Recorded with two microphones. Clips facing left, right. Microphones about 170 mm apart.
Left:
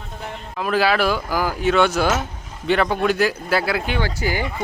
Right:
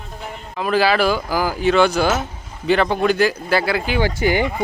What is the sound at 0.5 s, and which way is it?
Speech, centre (ahead or behind).